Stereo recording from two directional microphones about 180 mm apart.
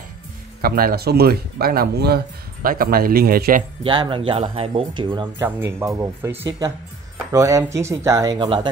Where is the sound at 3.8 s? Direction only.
25° right (ahead or behind).